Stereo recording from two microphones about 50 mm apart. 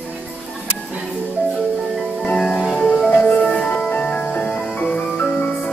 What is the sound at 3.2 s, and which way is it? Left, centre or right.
Music, centre.